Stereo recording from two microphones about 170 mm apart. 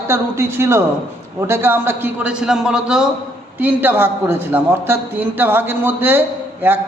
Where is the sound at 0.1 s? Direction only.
15° right (ahead or behind).